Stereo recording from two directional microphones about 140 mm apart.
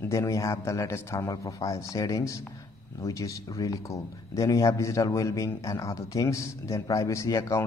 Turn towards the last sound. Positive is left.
turn(degrees=20)  # may be behind; listen again after turning